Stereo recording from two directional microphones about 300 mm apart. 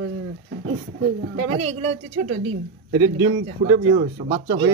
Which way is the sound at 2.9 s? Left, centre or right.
Centre.